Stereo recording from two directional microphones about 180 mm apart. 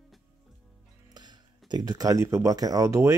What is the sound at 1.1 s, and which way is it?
Speech, 25° right (ahead or behind).